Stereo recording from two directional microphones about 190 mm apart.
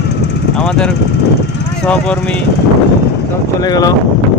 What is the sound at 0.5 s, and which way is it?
Speech, 5° left (ahead or behind).